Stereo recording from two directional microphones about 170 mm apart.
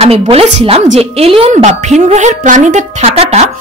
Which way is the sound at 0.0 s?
35° right (ahead or behind).